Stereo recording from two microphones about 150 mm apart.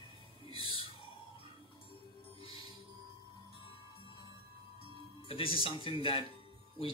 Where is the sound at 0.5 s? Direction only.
35° left (ahead or behind).